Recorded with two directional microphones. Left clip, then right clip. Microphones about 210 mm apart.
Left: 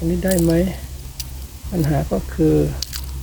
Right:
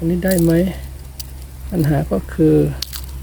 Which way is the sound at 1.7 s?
45° right (ahead or behind).